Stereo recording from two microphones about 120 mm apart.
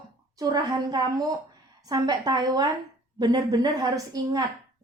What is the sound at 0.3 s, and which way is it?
A woman's voice, 35° right (ahead or behind).